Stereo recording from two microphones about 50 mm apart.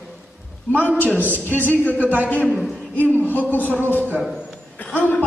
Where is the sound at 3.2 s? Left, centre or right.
Left.